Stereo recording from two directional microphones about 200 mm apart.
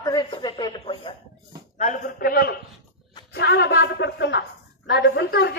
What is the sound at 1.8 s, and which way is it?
A man's voice, 45° left (ahead or behind).